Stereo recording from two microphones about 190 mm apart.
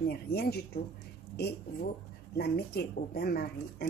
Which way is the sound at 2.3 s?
60° left (ahead or behind).